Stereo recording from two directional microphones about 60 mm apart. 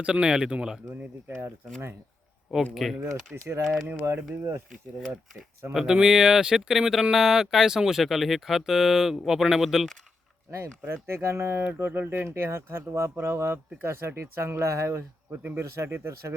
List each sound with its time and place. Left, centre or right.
0.0 s speech: centre
2.7 s speech: centre
3.0 s speech: right
4.9 s speech: centre
10.8 s speech: right
11.9 s speech: right